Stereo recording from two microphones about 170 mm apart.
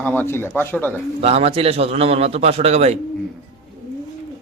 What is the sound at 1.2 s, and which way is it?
A man's voice, 35° right (ahead or behind).